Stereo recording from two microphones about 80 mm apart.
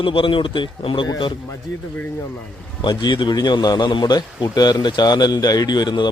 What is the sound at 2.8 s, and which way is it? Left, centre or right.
A man's voice, left.